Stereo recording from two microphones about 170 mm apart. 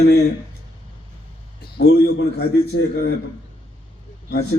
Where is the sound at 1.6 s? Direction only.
70° left (ahead or behind).